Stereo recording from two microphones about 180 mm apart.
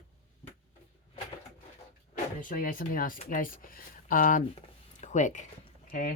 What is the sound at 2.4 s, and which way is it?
Speech, 50° left (ahead or behind).